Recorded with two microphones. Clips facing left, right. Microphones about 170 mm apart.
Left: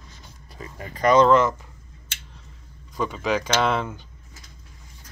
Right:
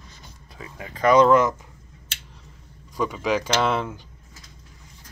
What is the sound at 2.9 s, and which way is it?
Speech, 10° right (ahead or behind).